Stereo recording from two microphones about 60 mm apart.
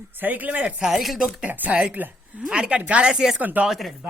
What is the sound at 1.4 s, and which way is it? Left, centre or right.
Speech, right.